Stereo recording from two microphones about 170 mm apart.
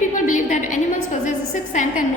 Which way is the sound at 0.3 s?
45° left (ahead or behind).